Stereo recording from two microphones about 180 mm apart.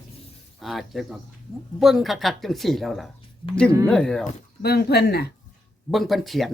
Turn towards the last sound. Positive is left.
turn(degrees=0)  # may be behind; listen again after turning